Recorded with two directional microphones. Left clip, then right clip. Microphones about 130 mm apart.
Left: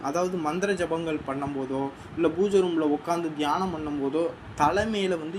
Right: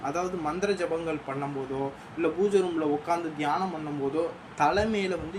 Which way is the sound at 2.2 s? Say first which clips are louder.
Left 2 dB; 30° left (ahead or behind).